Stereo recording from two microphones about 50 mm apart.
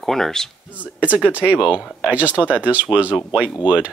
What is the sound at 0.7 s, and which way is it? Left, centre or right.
Speech, right.